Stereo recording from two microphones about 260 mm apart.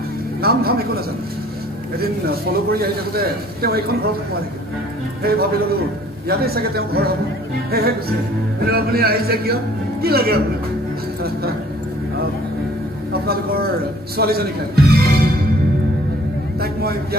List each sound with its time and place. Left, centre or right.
0.4 s speech: right
2.0 s speech: right
5.2 s speech: right
8.5 s speech: right
14.1 s speech: right
16.5 s a man's voice: right